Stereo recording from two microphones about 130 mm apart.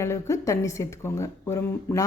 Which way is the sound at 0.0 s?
20° left (ahead or behind).